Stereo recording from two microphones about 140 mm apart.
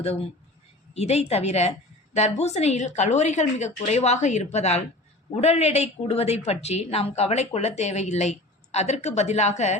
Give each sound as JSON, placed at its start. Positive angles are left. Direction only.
{"t": 0.0, "sound": "speech", "side_deg": 45}